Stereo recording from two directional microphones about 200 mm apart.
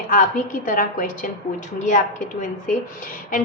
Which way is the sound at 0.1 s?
40° left (ahead or behind).